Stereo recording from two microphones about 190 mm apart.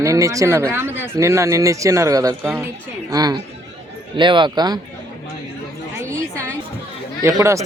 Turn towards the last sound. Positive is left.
turn(degrees=-15)  # may be behind; listen again after turning